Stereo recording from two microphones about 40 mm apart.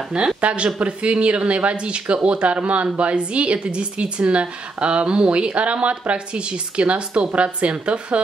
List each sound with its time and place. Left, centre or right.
0.4 s a woman's voice: right